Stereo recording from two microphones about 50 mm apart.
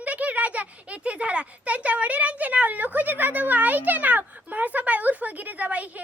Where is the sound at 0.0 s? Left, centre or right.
Right.